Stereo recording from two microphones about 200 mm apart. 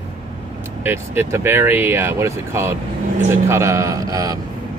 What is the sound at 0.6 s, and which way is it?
Speech, 10° right (ahead or behind).